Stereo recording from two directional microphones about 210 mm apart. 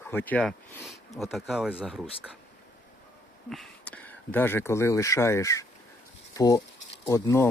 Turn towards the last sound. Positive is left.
turn(degrees=15)  # may be behind; listen again after turning